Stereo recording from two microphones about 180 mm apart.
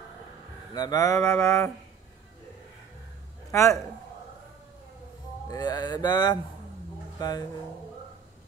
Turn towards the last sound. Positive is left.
turn(degrees=20)  # may be behind; listen again after turning